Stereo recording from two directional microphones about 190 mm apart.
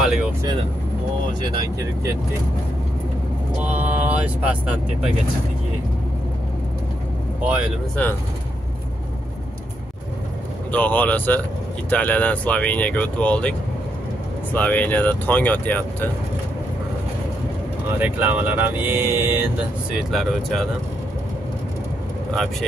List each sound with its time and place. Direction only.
0.0 s vehicle: 5° right (ahead or behind)
1.4 s speech: 20° right (ahead or behind)
3.5 s speech: 10° right (ahead or behind)
7.9 s speech: 10° left (ahead or behind)
10.7 s speech: 10° left (ahead or behind)
17.9 s speech: 10° right (ahead or behind)
20.0 s speech: centre (ahead or behind)
22.3 s speech: centre (ahead or behind)